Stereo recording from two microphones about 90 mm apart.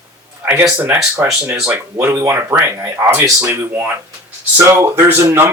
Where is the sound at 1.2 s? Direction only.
20° right (ahead or behind).